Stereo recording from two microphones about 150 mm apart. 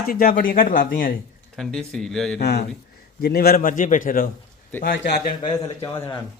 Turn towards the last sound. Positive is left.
turn(degrees=20)  # may be behind; listen again after turning